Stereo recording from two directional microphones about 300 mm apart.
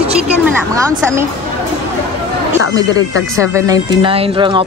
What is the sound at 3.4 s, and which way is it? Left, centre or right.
Speech, centre.